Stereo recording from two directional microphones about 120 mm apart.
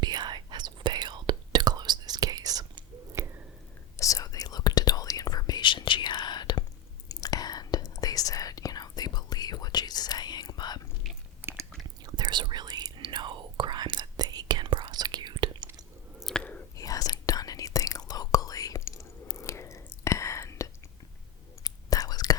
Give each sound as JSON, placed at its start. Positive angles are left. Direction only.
{"t": 0.0, "sound": "whispering", "side_deg": -35}
{"t": 3.9, "sound": "whispering", "side_deg": 25}
{"t": 11.1, "sound": "chewing", "side_deg": 0}
{"t": 12.0, "sound": "whispering", "side_deg": -40}
{"t": 16.2, "sound": "chewing", "side_deg": 10}
{"t": 16.7, "sound": "whispering", "side_deg": 30}